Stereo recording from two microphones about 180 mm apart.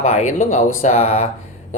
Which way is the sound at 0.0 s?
40° left (ahead or behind).